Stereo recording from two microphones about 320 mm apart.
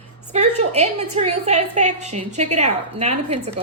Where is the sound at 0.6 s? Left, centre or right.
Centre.